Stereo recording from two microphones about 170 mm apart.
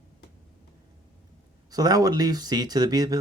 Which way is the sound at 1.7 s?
20° right (ahead or behind).